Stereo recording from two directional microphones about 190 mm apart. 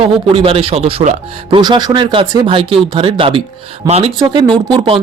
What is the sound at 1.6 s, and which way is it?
Speech, 20° right (ahead or behind).